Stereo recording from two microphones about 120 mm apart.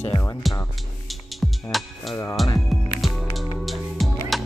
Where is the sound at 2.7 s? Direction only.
Centre (ahead or behind).